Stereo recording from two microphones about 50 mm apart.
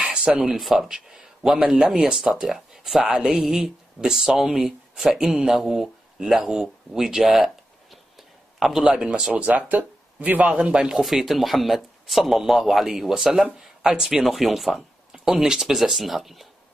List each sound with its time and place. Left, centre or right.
0.0 s a sound: centre
0.3 s speech: centre
0.6 s speech: centre
2.1 s speech: centre
3.2 s speech: centre
3.6 s a woman's voice: centre
8.8 s speech: right
10.6 s speech: centre
11.0 s speech: centre